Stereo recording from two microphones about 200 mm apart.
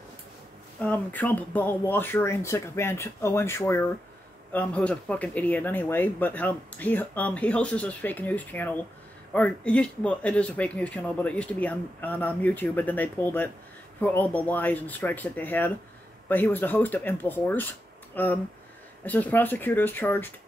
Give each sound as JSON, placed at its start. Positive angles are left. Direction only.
{"t": 0.7, "sound": "speech", "side_deg": 10}